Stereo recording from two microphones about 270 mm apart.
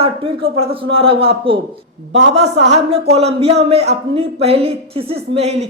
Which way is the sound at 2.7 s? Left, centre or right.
Right.